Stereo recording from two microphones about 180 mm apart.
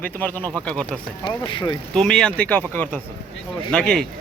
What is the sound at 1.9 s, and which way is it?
Speech, 5° left (ahead or behind).